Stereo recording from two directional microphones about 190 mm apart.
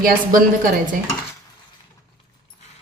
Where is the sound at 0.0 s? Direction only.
45° right (ahead or behind).